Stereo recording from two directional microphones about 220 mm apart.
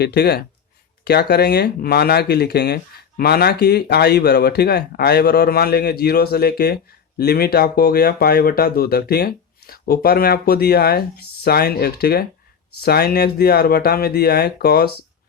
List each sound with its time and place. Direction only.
0.0 s speech: 45° left (ahead or behind)